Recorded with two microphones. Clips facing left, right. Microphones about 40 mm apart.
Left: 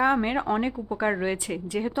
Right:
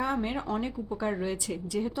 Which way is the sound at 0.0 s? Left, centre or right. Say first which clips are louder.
Left 7 dB; left.